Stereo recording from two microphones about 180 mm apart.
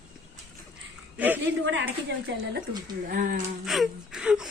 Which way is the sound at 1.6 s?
90° right.